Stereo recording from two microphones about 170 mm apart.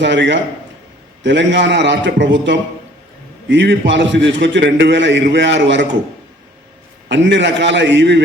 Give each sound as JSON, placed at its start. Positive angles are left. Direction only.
{"t": 0.0, "sound": "a man's voice", "side_deg": -90}
{"t": 7.1, "sound": "a man's voice", "side_deg": -90}